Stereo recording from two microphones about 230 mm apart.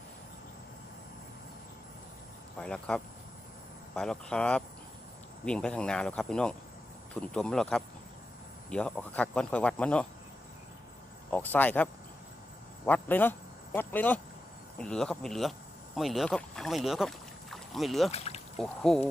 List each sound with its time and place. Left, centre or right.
2.6 s speech: centre
11.3 s speech: centre
18.1 s a sound: left
18.6 s speech: centre